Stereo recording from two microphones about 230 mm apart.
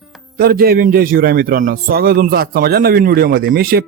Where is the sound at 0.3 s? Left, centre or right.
Right.